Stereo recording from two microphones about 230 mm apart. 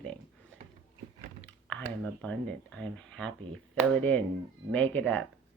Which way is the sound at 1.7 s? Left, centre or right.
Centre.